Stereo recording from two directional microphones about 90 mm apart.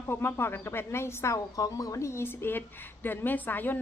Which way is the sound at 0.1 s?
25° left (ahead or behind).